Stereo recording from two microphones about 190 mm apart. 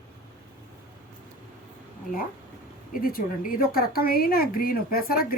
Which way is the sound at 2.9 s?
50° left (ahead or behind).